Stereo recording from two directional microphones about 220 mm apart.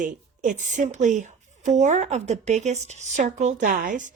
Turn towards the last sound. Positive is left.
turn(degrees=-35)  # may be behind; listen again after turning